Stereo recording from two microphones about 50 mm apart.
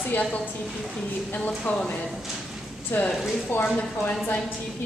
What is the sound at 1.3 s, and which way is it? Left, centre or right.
Speech, left.